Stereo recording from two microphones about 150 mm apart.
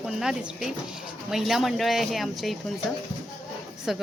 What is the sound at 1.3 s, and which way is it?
A woman's voice, centre (ahead or behind).